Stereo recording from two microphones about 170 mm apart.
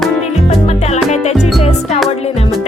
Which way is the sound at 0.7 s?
40° left (ahead or behind).